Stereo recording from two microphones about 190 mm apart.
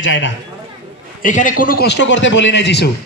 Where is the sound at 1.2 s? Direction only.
45° left (ahead or behind); by 2.9 s 65° left (ahead or behind).